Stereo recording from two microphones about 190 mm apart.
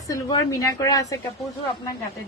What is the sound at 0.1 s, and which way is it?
A woman's voice, 15° left (ahead or behind).